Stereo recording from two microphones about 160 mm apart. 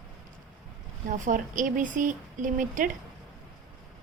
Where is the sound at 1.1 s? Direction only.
55° right (ahead or behind).